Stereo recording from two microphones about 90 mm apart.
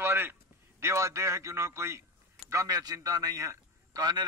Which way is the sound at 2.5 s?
40° right (ahead or behind).